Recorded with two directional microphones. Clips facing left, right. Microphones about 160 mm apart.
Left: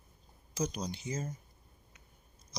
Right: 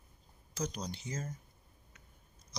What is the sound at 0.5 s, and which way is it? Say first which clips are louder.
Speech: left 3 dB; 15° left (ahead or behind).